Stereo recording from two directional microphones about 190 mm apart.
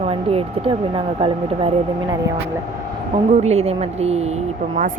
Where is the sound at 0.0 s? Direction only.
30° right (ahead or behind).